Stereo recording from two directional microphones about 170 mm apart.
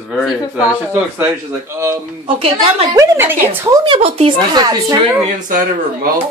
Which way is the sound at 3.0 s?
15° right (ahead or behind).